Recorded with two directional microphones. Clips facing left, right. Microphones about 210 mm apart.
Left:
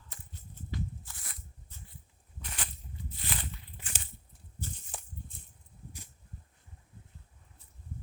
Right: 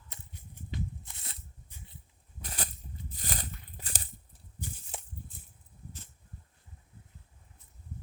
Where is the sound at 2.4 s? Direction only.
40° right (ahead or behind).